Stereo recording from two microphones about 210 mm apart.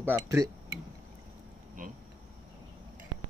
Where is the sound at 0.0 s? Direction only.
10° right (ahead or behind).